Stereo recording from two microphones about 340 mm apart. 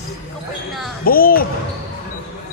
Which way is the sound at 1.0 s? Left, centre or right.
Left.